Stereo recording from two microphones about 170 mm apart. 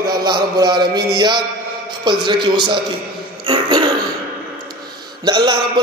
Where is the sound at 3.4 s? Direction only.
25° right (ahead or behind).